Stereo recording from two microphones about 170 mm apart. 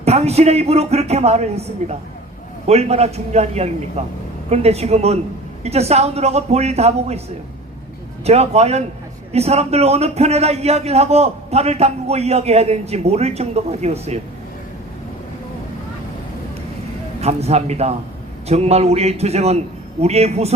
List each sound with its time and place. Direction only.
0.0 s a man's voice: 40° right (ahead or behind)
8.2 s a man's voice: 40° right (ahead or behind)
17.2 s a man's voice: 40° right (ahead or behind)